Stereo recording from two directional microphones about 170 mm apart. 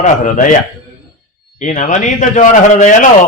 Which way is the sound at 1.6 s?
45° left (ahead or behind).